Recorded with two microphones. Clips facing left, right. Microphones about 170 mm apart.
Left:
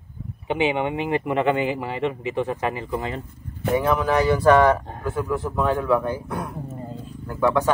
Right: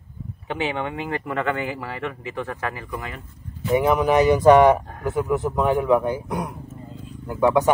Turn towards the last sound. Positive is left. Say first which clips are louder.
# right 2 dB
turn(degrees=-15)  # may be behind; listen again after turning